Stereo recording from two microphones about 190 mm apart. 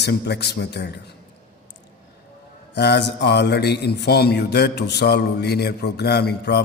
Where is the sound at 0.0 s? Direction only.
60° left (ahead or behind).